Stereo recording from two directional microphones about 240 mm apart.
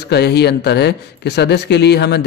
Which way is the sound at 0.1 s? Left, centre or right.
Left.